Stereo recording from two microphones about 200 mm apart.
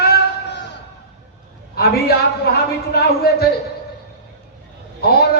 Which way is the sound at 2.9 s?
50° left (ahead or behind).